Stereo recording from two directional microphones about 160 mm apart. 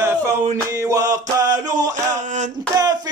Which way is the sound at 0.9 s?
20° right (ahead or behind).